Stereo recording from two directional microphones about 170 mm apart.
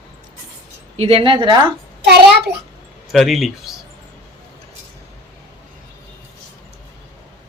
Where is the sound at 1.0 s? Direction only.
35° right (ahead or behind).